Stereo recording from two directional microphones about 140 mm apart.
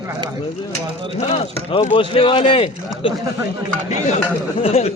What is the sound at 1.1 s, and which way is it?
Speech, 50° left (ahead or behind).